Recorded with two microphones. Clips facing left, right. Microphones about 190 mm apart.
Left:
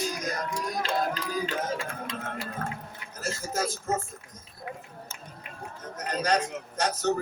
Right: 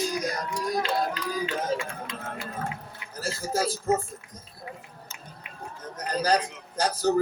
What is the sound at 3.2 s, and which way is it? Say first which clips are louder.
Mantra: right 3 dB; 30° right (ahead or behind).